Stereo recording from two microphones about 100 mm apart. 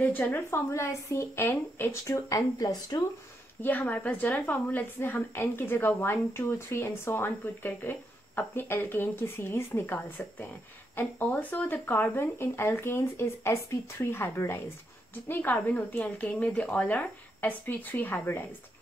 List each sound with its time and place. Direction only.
0.0 s a woman's voice: 20° left (ahead or behind); by 3.0 s 40° left (ahead or behind)
3.6 s a woman's voice: 15° left (ahead or behind)